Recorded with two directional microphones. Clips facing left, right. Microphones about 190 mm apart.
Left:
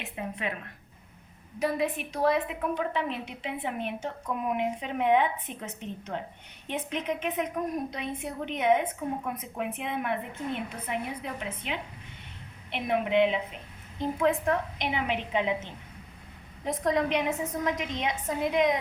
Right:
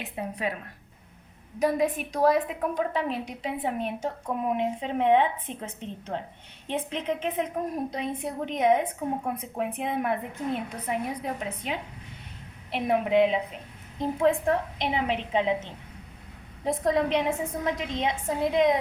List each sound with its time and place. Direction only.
0.0 s a woman's voice: 35° right (ahead or behind)
1.5 s a woman's voice: 40° right (ahead or behind)